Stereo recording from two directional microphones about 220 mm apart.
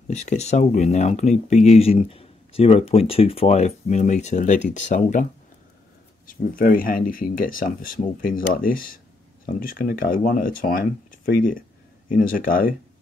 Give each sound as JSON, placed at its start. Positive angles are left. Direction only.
{"t": 0.1, "sound": "speech", "side_deg": 30}